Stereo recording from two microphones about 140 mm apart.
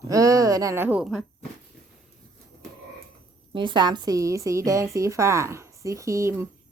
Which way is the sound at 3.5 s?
35° right (ahead or behind).